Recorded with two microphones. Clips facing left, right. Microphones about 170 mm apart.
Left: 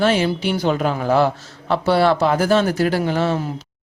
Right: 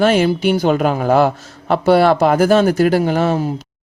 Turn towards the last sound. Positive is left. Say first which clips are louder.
# right 4 dB
turn(degrees=-45)  # may be behind; listen again after turning